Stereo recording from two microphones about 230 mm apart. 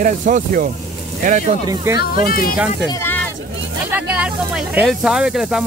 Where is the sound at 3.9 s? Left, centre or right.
Centre.